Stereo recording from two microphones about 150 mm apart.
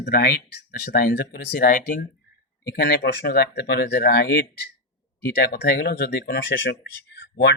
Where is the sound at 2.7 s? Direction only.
90° left.